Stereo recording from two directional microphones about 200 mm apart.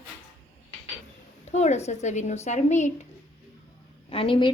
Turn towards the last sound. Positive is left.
turn(degrees=25)  # may be behind; listen again after turning